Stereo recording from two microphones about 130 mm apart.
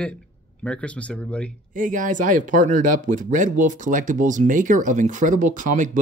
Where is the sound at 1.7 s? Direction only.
90° right.